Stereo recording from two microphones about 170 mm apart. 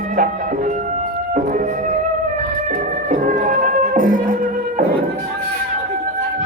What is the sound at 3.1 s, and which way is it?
Music, 50° right (ahead or behind).